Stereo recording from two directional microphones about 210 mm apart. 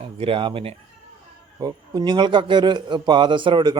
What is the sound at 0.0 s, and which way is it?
A man's voice, 25° right (ahead or behind).